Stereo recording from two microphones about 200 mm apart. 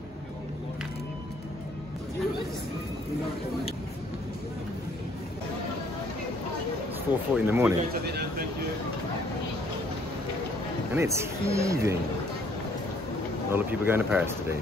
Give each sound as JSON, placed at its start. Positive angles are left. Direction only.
{"t": 7.1, "sound": "speech", "side_deg": -10}
{"t": 7.9, "sound": "speech", "side_deg": -50}
{"t": 11.0, "sound": "speech", "side_deg": -15}
{"t": 13.5, "sound": "speech", "side_deg": -10}